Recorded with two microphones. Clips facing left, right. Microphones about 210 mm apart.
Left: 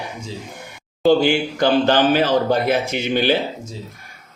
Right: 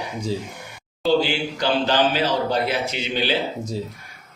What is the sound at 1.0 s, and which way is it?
Speech, 50° left (ahead or behind).